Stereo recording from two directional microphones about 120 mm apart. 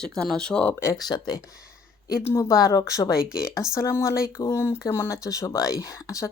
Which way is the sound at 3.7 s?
25° left (ahead or behind).